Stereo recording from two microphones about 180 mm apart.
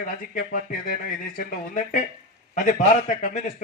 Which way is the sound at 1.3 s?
45° left (ahead or behind).